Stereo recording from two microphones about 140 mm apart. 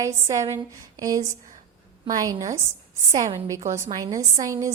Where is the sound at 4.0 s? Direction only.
25° right (ahead or behind).